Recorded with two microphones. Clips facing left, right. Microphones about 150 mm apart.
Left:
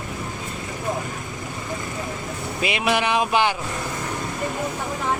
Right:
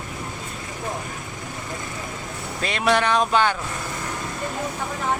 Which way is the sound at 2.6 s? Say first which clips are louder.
Right 1 dB; 10° left (ahead or behind).